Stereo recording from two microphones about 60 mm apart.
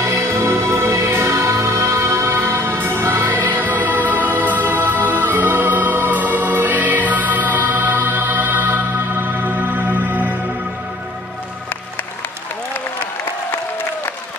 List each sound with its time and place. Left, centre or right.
0.0 s music: right